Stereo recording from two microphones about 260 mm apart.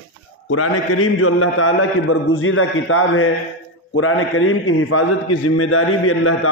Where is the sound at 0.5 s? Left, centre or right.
Left.